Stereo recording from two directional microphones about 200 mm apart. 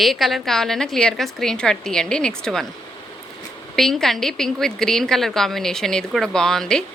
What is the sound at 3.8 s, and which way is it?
A woman's voice, centre (ahead or behind).